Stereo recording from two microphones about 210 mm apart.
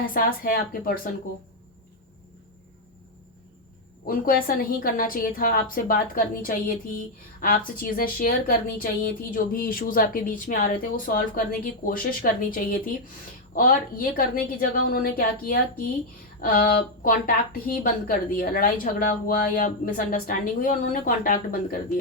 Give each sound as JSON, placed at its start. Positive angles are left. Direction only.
{"t": 0.0, "sound": "speech", "side_deg": 40}
{"t": 4.0, "sound": "speech", "side_deg": 45}